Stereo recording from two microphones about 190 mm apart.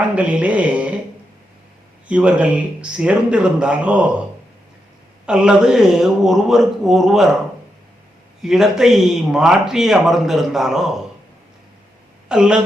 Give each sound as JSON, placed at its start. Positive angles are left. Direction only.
{"t": 0.0, "sound": "music", "side_deg": -5}
{"t": 2.0, "sound": "a man's voice", "side_deg": -5}
{"t": 5.2, "sound": "speech", "side_deg": -5}
{"t": 8.4, "sound": "speech", "side_deg": 0}
{"t": 12.3, "sound": "speech", "side_deg": -5}